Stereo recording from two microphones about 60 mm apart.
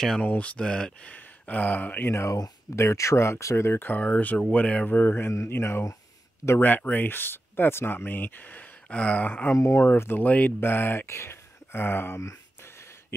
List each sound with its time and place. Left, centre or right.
0.2 s speech: left
1.1 s speech: left
2.2 s speech: left
2.7 s speech: left
3.9 s speech: left
4.8 s speech: left
6.6 s speech: left
8.9 s speech: left
9.5 s speech: left
9.8 s speech: left
10.2 s speech: left
10.6 s speech: left